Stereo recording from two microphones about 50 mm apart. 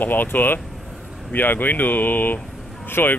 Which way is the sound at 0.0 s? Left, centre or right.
Left.